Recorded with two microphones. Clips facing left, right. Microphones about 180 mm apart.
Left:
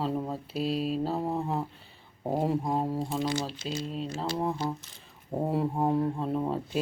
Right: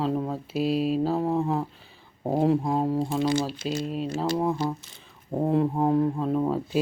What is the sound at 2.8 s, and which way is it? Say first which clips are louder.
Speech: right 5 dB; 20° right (ahead or behind).